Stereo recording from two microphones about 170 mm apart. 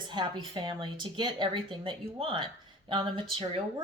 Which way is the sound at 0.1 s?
25° right (ahead or behind).